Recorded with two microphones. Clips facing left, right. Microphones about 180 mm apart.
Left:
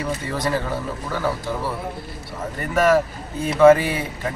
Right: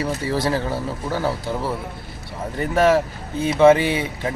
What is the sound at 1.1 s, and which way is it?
Speech, 30° right (ahead or behind).